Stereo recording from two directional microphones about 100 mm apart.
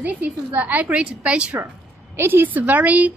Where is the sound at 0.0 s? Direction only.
15° right (ahead or behind).